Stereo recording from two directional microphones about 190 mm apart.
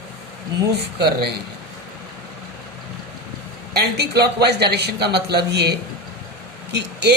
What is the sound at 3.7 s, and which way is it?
Speech, 60° right (ahead or behind).